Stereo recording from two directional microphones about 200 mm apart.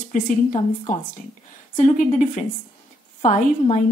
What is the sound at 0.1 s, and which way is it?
A woman's voice, 40° left (ahead or behind).